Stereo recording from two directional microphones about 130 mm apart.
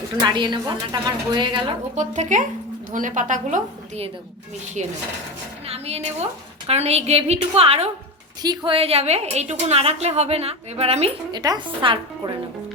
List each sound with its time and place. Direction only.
0.2 s a woman's voice: 35° right (ahead or behind)
2.0 s a woman's voice: 70° right (ahead or behind)
5.6 s a sound: 50° right (ahead or behind)
6.7 s a woman's voice: 55° right (ahead or behind)
8.4 s a woman's voice: 30° right (ahead or behind)
8.7 s a woman's voice: 50° right (ahead or behind)
11.3 s a woman's voice: 35° right (ahead or behind)